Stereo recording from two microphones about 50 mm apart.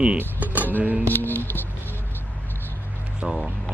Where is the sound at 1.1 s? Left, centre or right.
Left.